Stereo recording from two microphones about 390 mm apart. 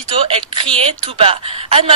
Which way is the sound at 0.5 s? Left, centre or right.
Centre.